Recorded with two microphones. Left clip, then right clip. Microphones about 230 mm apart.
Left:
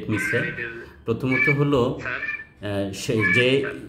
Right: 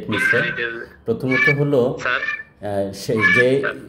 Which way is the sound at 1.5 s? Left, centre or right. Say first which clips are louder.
Right 4 dB; centre.